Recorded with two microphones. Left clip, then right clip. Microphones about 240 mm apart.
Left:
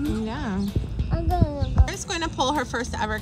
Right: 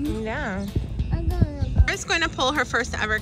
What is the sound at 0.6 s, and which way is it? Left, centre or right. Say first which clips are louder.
Music: left 1 dB; centre.